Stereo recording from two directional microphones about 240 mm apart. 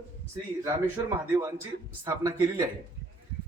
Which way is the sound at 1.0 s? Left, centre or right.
Centre.